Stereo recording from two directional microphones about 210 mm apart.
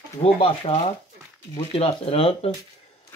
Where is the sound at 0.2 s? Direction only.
25° left (ahead or behind).